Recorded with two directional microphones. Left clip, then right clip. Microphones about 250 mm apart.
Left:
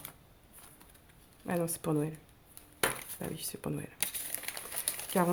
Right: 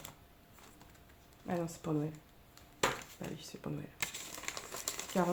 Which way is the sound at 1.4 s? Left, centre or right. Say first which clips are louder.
Left 5 dB; left.